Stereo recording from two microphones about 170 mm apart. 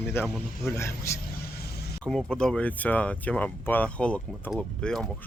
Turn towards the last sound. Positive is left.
turn(degrees=5)  # may be behind; listen again after turning